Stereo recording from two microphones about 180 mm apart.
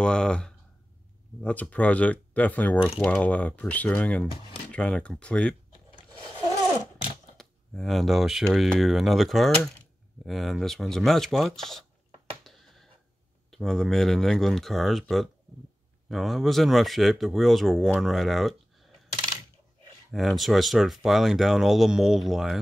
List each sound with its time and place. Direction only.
0.0 s speech: 5° left (ahead or behind)
7.3 s speech: centre (ahead or behind)
12.4 s a sound: centre (ahead or behind)
13.5 s speech: centre (ahead or behind)
20.1 s speech: centre (ahead or behind)